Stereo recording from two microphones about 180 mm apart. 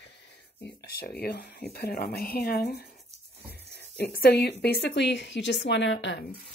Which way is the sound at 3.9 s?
60° left (ahead or behind).